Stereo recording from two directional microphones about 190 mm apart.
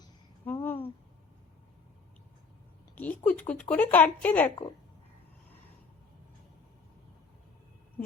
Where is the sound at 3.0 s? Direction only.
10° left (ahead or behind).